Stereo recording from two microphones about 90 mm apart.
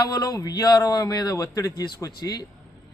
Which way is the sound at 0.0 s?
45° left (ahead or behind).